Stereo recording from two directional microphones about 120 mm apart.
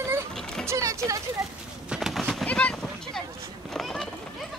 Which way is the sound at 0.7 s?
25° right (ahead or behind).